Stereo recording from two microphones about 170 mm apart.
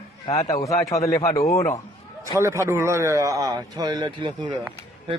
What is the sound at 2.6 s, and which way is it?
Speech, 15° right (ahead or behind).